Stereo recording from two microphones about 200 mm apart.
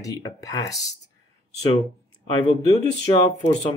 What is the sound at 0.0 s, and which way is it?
Speech, 15° left (ahead or behind).